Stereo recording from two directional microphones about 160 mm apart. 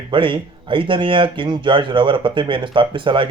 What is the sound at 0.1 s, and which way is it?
Speech, 30° right (ahead or behind).